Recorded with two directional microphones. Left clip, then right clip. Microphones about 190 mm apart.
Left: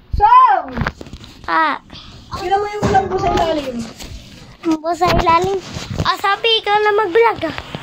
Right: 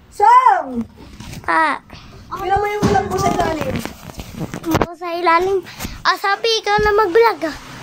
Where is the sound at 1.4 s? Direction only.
Centre (ahead or behind).